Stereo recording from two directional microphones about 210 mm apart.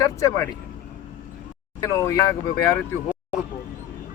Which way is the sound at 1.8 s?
15° left (ahead or behind).